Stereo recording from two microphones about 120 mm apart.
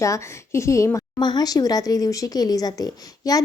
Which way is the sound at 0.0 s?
25° left (ahead or behind).